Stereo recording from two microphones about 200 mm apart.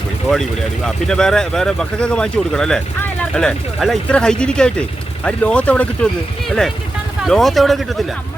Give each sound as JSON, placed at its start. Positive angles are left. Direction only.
{"t": 0.9, "sound": "speech", "side_deg": 5}
{"t": 7.3, "sound": "speech", "side_deg": 0}